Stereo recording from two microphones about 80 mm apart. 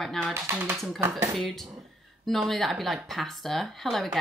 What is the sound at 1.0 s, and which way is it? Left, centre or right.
Speech, right.